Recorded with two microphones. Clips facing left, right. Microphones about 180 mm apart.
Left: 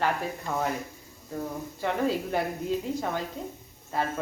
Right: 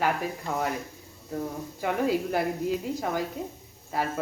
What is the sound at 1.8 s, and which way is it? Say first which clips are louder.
Speech: right 1 dB; 10° right (ahead or behind).